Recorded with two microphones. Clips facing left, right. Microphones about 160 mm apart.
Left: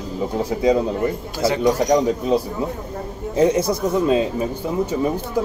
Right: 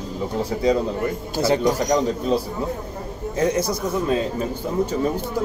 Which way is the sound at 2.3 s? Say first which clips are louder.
Left 2 dB; 15° left (ahead or behind).